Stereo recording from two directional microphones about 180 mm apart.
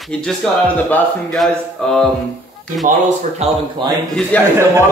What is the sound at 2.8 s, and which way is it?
Speech, 40° right (ahead or behind).